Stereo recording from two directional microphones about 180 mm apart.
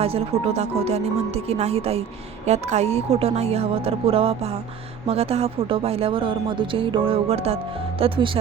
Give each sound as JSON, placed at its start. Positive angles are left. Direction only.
{"t": 0.0, "sound": "speech", "side_deg": -35}